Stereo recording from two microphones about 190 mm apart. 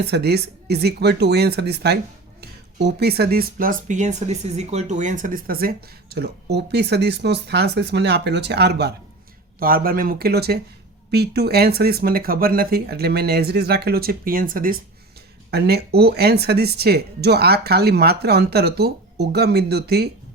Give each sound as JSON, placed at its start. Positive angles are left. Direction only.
{"t": 0.0, "sound": "speech", "side_deg": -60}
{"t": 9.6, "sound": "speech", "side_deg": -50}